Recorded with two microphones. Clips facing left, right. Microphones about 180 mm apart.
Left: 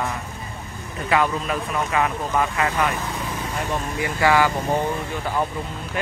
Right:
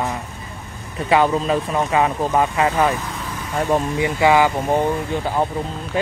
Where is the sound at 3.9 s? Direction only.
20° right (ahead or behind).